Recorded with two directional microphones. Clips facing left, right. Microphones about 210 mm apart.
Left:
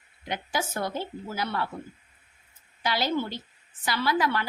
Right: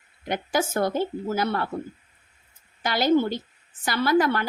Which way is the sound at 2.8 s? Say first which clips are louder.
Right 7 dB; 50° right (ahead or behind).